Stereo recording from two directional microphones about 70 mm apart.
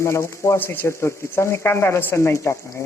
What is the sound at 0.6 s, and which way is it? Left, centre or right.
Stir, left.